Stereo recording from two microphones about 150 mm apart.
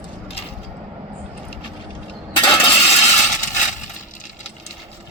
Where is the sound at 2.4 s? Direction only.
45° left (ahead or behind).